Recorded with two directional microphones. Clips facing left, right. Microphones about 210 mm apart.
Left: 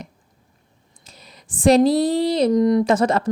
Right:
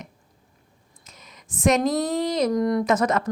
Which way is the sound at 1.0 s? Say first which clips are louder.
Left 3 dB; 35° left (ahead or behind).